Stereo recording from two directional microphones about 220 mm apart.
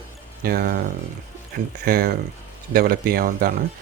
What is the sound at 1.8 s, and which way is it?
Speech, 45° right (ahead or behind).